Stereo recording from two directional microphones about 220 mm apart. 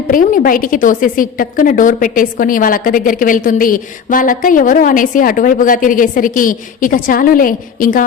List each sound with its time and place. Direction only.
0.1 s a woman's voice: 40° left (ahead or behind)